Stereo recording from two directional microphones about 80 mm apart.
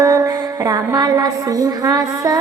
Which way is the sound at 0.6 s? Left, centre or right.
Right.